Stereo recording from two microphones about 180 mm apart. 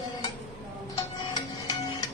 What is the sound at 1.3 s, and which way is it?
Music, 20° left (ahead or behind).